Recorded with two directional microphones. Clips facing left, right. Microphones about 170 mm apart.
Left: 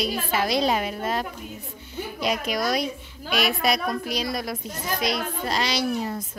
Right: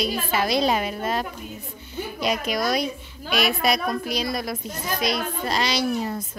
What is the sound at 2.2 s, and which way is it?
Speech, centre (ahead or behind).